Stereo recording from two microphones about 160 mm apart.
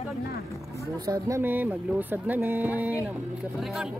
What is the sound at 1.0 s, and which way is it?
Speech, 20° right (ahead or behind).